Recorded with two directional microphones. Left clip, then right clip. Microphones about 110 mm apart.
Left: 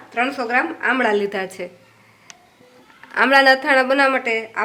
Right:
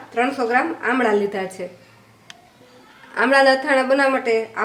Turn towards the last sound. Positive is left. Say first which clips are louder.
# right 1 dB
turn(degrees=25)  # may be behind; listen again after turning